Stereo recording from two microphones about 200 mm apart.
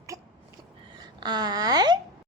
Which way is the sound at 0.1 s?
15° right (ahead or behind).